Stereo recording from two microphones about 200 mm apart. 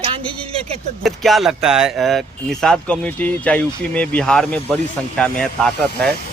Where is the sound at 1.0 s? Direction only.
Centre (ahead or behind).